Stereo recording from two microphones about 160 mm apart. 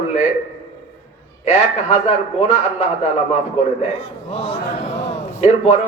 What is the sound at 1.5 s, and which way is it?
A man's voice, 45° left (ahead or behind).